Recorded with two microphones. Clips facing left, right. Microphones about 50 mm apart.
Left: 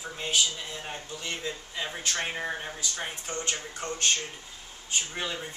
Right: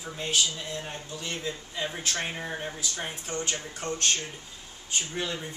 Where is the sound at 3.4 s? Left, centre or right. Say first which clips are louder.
Even; centre.